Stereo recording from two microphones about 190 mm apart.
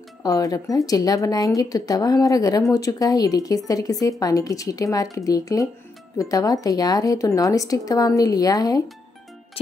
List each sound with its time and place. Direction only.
0.2 s speech: 20° left (ahead or behind)